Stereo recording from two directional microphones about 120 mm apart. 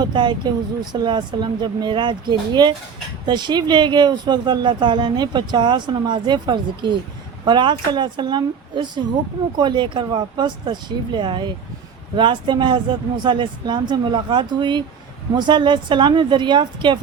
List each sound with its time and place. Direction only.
0.0 s speech: 40° right (ahead or behind)